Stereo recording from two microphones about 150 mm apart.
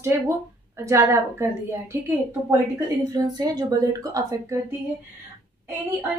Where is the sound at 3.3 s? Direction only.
25° right (ahead or behind).